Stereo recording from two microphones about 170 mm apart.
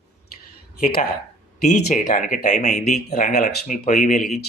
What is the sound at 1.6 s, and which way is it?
Speech, 45° left (ahead or behind).